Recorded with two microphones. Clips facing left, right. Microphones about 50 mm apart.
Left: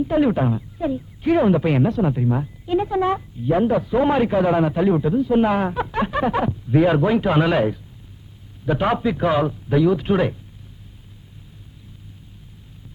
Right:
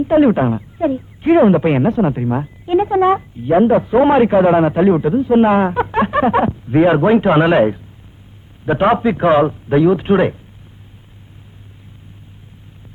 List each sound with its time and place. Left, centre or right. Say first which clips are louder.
0.0 s speech: right 6 dB; right